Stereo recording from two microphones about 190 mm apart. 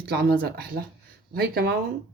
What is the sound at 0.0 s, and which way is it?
A woman's voice, 55° right (ahead or behind).